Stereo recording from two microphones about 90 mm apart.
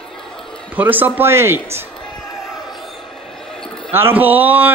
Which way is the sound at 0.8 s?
20° right (ahead or behind).